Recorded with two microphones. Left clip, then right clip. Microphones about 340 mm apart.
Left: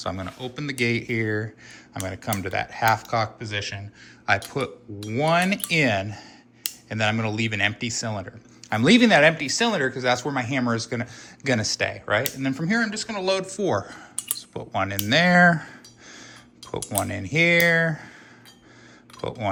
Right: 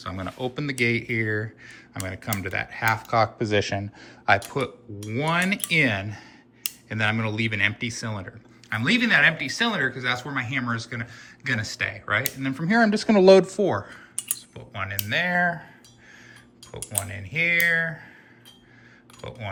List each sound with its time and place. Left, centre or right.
0.0 s speech: centre
3.3 s speech: centre
4.3 s speech: centre
12.9 s speech: centre
13.6 s speech: centre
16.8 s speech: centre